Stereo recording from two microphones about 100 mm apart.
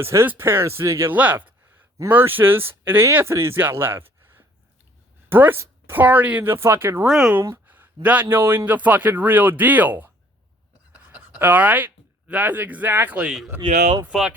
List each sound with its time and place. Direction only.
0.0 s speech: 25° right (ahead or behind)
7.1 s a man's voice: 5° right (ahead or behind)
7.3 s a sound: 20° right (ahead or behind)
8.0 s a man's voice: 15° right (ahead or behind)
11.0 s writing: 10° right (ahead or behind)
12.3 s a man's voice: 15° right (ahead or behind)